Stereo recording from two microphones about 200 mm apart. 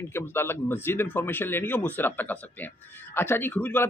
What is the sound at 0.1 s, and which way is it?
A man's voice, 10° left (ahead or behind).